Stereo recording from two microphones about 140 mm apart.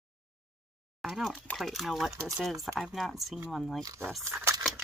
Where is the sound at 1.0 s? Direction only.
Centre (ahead or behind).